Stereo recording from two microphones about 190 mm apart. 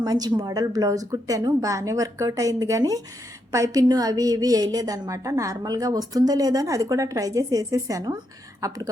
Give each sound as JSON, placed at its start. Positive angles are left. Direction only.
{"t": 0.0, "sound": "a woman's voice", "side_deg": -20}